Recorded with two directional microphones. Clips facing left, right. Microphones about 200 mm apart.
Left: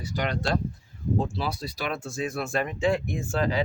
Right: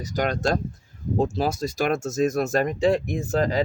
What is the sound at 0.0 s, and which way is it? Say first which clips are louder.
Speech: right 5 dB; 45° right (ahead or behind).